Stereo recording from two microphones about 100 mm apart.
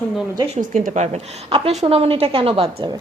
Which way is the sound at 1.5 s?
75° right (ahead or behind).